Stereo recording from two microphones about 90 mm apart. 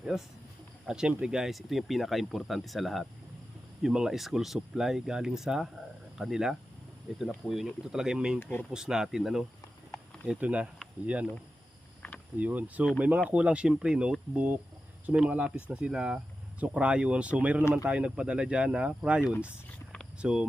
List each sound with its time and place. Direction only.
0.9 s speech: 10° right (ahead or behind)
8.4 s speech: 25° left (ahead or behind)
8.7 s speech: 5° right (ahead or behind)
10.2 s speech: 15° right (ahead or behind)
12.4 s speech: 15° right (ahead or behind)